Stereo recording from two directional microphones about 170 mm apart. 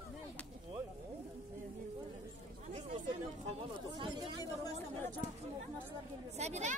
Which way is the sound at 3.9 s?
25° right (ahead or behind).